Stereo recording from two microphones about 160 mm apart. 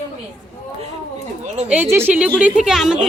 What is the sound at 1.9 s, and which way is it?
A woman's voice, 10° right (ahead or behind).